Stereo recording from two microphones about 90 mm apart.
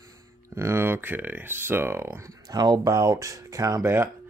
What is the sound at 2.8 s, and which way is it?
Speech, 40° right (ahead or behind).